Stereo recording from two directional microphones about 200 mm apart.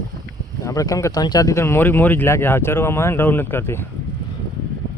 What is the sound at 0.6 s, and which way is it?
Speech, 15° left (ahead or behind).